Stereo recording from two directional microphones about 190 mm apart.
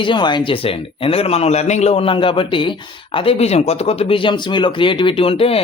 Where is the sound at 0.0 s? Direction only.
25° left (ahead or behind).